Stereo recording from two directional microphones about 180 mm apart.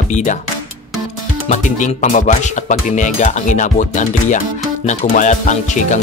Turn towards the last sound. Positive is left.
turn(degrees=45)  # may be behind; listen again after turning